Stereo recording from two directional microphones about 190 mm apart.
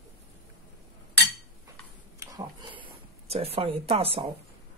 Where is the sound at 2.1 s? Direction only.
25° right (ahead or behind).